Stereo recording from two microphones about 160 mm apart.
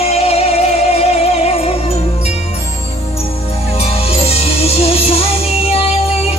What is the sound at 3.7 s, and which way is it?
Music, 40° left (ahead or behind).